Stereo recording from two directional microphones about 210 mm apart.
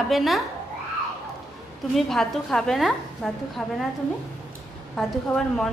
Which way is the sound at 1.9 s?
Centre (ahead or behind).